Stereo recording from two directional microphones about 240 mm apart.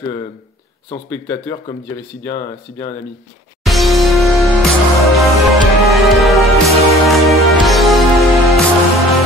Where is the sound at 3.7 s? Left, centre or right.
Centre.